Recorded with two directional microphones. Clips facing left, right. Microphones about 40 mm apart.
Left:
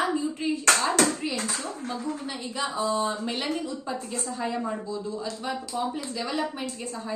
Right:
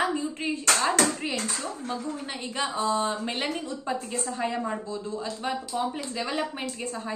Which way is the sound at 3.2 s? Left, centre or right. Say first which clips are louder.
Even; right.